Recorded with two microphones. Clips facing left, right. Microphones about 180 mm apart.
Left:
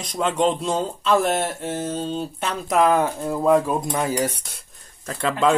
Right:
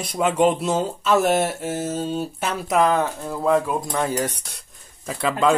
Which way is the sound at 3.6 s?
20° left (ahead or behind).